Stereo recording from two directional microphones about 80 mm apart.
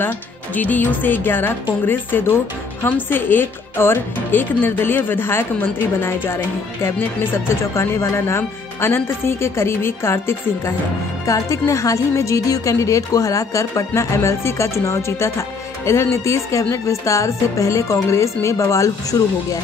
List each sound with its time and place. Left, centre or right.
0.6 s speech: left